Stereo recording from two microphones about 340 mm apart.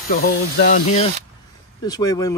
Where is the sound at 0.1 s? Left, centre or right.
Left.